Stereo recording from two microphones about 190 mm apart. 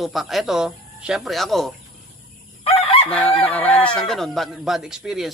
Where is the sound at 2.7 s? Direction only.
30° left (ahead or behind).